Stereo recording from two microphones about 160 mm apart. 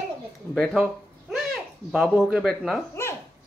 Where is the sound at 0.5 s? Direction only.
Centre (ahead or behind).